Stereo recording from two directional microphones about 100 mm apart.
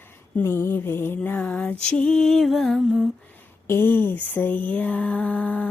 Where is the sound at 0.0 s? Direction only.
20° left (ahead or behind); by 3.1 s centre (ahead or behind).